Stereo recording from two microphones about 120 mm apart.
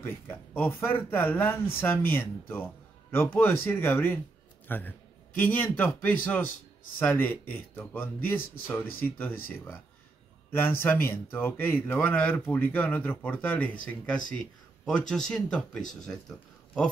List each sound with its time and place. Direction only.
0.0 s a man's voice: 20° left (ahead or behind)